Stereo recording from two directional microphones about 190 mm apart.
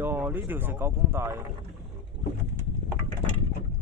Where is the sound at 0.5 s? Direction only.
10° right (ahead or behind).